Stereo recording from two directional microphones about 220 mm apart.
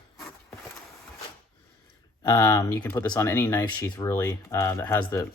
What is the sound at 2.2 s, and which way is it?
Speech, 15° left (ahead or behind).